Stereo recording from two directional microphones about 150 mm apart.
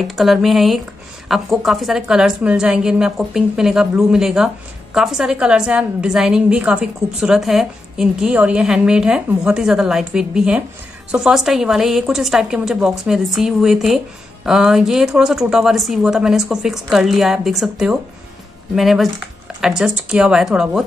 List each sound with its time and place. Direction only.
0.0 s a woman's voice: centre (ahead or behind)